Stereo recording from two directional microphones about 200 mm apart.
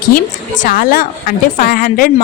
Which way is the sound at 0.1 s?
40° left (ahead or behind).